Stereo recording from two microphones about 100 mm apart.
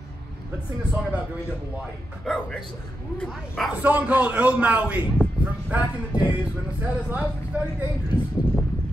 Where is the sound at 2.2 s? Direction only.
10° left (ahead or behind).